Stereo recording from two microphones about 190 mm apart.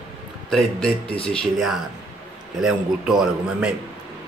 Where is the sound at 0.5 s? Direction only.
Centre (ahead or behind).